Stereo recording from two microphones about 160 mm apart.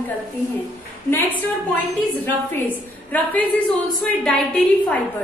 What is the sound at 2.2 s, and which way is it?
A woman's voice, 10° left (ahead or behind).